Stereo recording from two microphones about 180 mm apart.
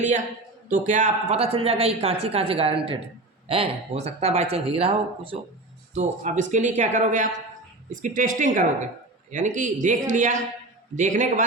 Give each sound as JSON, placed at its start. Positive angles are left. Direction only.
{"t": 0.7, "sound": "speech", "side_deg": -40}